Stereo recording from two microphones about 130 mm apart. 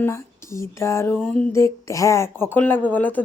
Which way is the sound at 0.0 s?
20° left (ahead or behind).